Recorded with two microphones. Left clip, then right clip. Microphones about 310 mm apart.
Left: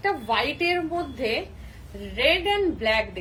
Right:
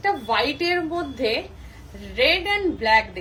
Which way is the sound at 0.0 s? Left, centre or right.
Centre.